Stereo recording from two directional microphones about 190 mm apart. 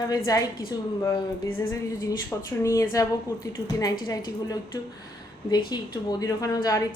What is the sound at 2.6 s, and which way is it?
Speech, 15° left (ahead or behind).